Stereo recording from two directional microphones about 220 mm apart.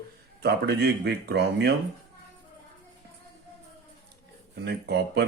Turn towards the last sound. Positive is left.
turn(degrees=-50)  # may be behind; listen again after turning